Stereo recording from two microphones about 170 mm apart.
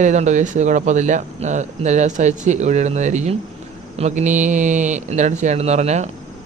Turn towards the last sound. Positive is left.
turn(degrees=-40)  # may be behind; listen again after turning